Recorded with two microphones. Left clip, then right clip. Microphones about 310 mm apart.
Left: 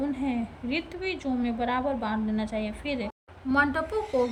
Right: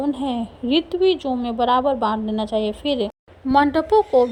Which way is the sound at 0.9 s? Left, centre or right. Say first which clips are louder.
Right 14 dB; centre.